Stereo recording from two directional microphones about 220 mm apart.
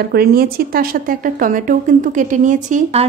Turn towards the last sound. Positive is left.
turn(degrees=-35)  # may be behind; listen again after turning